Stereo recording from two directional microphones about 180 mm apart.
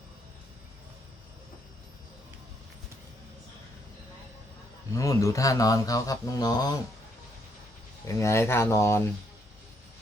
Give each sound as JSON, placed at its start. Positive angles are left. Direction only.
{"t": 4.9, "sound": "speech", "side_deg": 20}
{"t": 8.0, "sound": "speech", "side_deg": 15}